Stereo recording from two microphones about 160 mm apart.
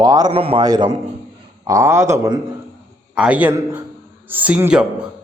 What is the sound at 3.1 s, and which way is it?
A man's voice, 5° right (ahead or behind).